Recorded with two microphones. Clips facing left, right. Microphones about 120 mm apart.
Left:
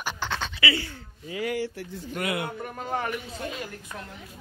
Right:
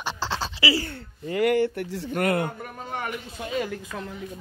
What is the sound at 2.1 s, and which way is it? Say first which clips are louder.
Speech: right 6 dB; 45° right (ahead or behind).